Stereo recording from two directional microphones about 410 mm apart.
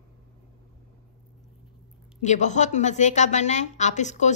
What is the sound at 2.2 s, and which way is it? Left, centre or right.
A woman's voice, centre.